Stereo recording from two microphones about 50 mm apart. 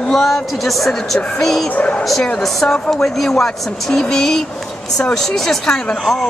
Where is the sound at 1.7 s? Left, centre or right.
Left.